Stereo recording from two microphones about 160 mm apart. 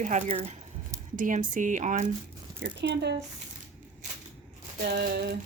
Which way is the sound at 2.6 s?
75° right (ahead or behind).